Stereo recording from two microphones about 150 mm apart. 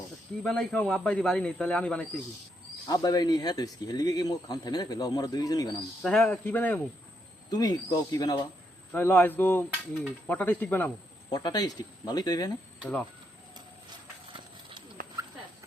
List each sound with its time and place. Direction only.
0.4 s a man's voice: 5° left (ahead or behind)
2.8 s speech: 25° left (ahead or behind)
6.0 s a man's voice: 5° left (ahead or behind)
7.5 s speech: 25° left (ahead or behind)
8.9 s a man's voice: 15° left (ahead or behind)
11.3 s speech: 25° left (ahead or behind)
14.3 s clip-clop: 30° right (ahead or behind)